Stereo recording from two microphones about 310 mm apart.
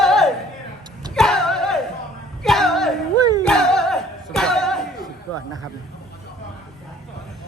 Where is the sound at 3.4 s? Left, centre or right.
Centre.